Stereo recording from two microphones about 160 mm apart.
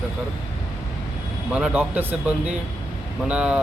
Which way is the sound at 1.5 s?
10° right (ahead or behind).